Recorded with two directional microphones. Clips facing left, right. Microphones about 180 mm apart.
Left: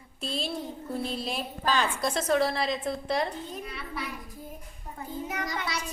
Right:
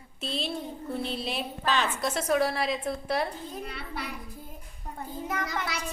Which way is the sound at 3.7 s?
65° right (ahead or behind).